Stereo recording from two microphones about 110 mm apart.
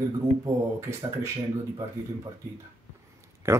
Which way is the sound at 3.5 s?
25° right (ahead or behind).